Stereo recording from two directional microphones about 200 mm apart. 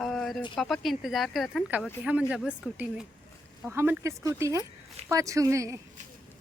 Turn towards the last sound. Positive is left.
turn(degrees=-15)  # may be behind; listen again after turning